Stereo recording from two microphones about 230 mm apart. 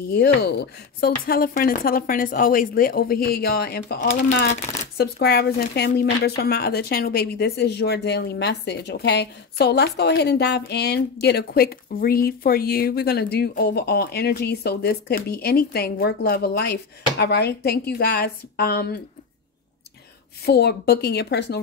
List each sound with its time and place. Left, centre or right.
0.1 s speech: left
20.4 s speech: left